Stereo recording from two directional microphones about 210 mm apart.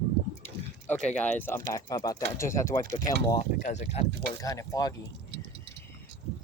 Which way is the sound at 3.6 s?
35° left (ahead or behind).